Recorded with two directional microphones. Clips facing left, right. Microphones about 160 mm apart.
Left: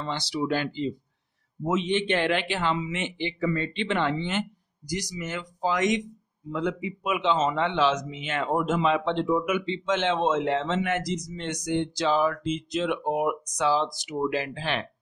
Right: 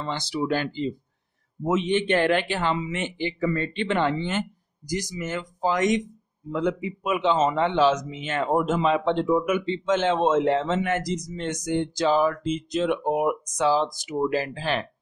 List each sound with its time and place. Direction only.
0.0 s a man's voice: 50° right (ahead or behind)